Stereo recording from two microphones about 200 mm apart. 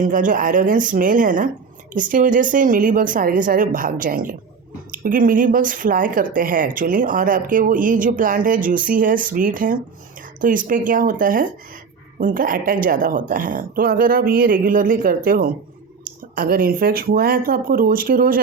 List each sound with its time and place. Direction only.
0.0 s a woman's voice: 40° right (ahead or behind)